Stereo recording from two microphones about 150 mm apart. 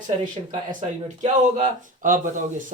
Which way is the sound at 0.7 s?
55° right (ahead or behind).